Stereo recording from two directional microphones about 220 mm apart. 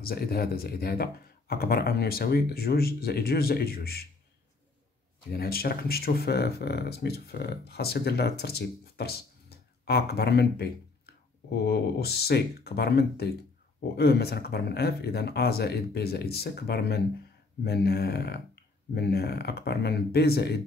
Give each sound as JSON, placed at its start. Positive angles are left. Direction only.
{"t": 0.1, "sound": "speech", "side_deg": 45}
{"t": 5.3, "sound": "speech", "side_deg": 45}